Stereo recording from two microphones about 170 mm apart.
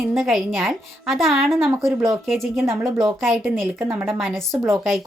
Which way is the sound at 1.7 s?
15° right (ahead or behind).